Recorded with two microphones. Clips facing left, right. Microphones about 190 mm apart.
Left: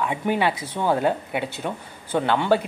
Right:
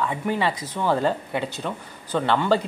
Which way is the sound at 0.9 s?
10° left (ahead or behind).